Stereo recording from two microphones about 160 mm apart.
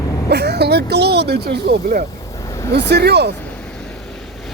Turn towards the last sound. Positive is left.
turn(degrees=5)  # may be behind; listen again after turning